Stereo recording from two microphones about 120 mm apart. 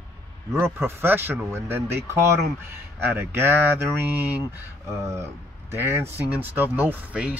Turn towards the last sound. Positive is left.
turn(degrees=-10)  # may be behind; listen again after turning